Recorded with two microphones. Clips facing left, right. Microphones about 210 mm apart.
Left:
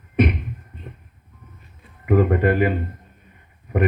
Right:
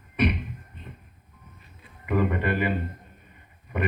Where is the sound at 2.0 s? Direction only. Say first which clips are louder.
Left 7 dB; 55° left (ahead or behind).